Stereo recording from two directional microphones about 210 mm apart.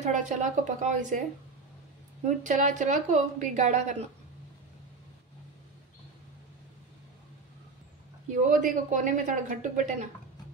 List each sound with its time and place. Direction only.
0.0 s speech: 35° right (ahead or behind)
2.2 s speech: 35° right (ahead or behind)
8.3 s speech: 35° right (ahead or behind)